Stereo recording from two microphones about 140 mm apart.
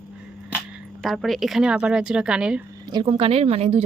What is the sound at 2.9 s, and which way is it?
Speech, 40° right (ahead or behind).